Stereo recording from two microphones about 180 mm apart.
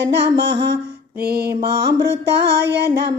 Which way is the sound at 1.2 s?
60° right (ahead or behind).